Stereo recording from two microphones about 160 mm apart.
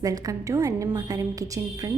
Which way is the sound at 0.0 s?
20° right (ahead or behind).